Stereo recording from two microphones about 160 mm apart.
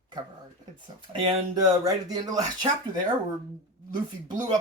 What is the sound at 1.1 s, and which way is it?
Speech, 25° right (ahead or behind).